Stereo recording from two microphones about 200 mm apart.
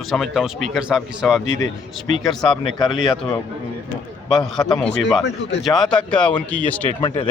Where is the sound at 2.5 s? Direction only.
20° left (ahead or behind).